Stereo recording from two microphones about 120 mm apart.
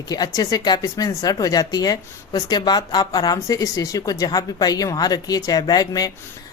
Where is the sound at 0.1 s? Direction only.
30° left (ahead or behind).